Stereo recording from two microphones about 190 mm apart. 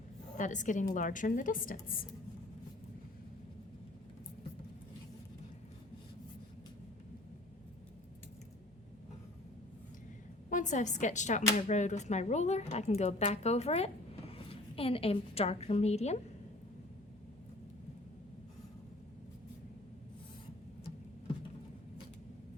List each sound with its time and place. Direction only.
0.3 s a woman's voice: 40° left (ahead or behind)
10.5 s speech: 40° left (ahead or behind)